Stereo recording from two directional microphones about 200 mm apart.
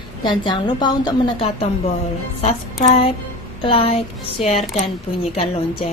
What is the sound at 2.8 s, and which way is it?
A woman's voice, 30° left (ahead or behind).